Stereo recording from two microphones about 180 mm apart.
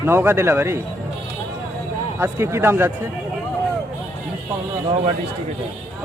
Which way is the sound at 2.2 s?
15° right (ahead or behind).